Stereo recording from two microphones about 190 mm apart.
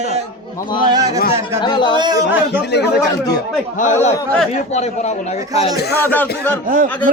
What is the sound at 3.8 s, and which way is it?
Speech, 40° left (ahead or behind).